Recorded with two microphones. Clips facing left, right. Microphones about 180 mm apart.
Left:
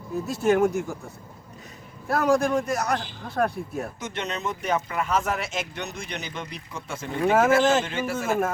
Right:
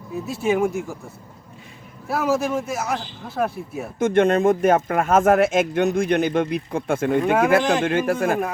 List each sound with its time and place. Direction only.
0.1 s speech: centre (ahead or behind)
3.9 s speech: 50° right (ahead or behind)